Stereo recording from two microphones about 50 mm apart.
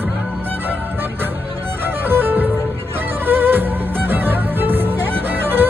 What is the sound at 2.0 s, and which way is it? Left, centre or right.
Music, right.